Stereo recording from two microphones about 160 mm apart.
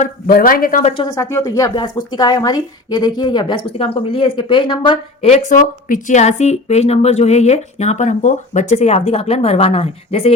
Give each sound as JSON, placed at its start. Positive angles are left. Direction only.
{"t": 0.0, "sound": "speech", "side_deg": 65}
{"t": 0.8, "sound": "speech", "side_deg": 45}
{"t": 1.0, "sound": "speech", "side_deg": 20}
{"t": 5.3, "sound": "speech", "side_deg": 55}